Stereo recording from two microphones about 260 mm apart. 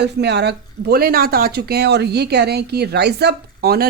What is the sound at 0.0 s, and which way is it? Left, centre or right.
Speech, right.